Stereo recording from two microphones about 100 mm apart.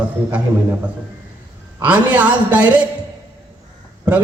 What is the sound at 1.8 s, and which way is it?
A man's voice, 15° right (ahead or behind).